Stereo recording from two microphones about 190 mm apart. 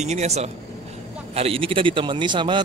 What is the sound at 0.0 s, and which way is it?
A man's voice, 35° right (ahead or behind).